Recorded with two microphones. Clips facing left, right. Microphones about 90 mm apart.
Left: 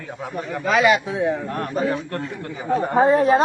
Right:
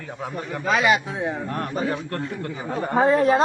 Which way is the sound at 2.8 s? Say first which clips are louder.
Left 2 dB; 25° left (ahead or behind).